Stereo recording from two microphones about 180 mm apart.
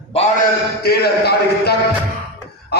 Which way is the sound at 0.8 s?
60° left (ahead or behind).